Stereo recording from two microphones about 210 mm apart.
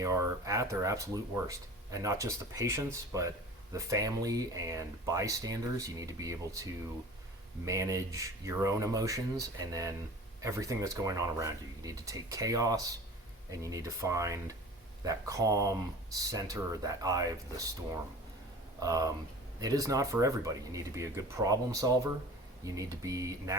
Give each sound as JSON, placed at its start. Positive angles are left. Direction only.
{"t": 0.0, "sound": "speech", "side_deg": -15}
{"t": 18.8, "sound": "speech", "side_deg": -15}